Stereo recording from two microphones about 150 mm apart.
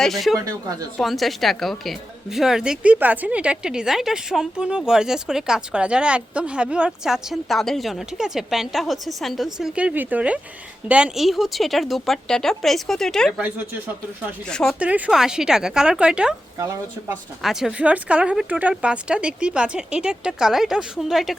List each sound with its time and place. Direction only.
0.0 s a woman's voice: centre (ahead or behind)
0.3 s speech: 25° right (ahead or behind)
0.9 s a woman's voice: centre (ahead or behind)
13.4 s speech: 10° right (ahead or behind)
14.5 s a woman's voice: 5° left (ahead or behind)
14.8 s a woman's voice: 10° right (ahead or behind)
16.6 s speech: 20° right (ahead or behind)
17.4 s speech: 5° right (ahead or behind)